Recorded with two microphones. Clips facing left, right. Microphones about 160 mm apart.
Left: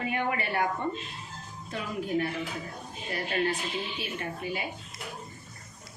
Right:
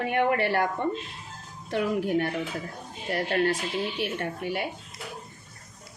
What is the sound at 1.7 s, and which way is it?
A woman's voice, 75° right (ahead or behind).